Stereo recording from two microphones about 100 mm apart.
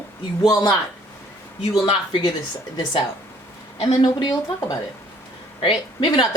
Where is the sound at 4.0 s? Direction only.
45° left (ahead or behind).